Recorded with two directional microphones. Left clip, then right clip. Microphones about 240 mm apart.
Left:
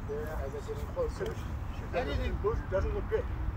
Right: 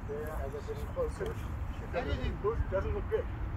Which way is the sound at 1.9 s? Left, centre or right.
Left.